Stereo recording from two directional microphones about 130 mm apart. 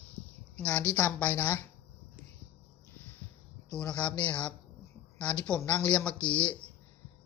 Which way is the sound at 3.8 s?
10° left (ahead or behind).